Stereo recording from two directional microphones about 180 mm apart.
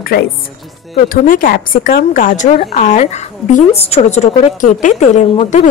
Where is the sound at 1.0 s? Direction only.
50° left (ahead or behind).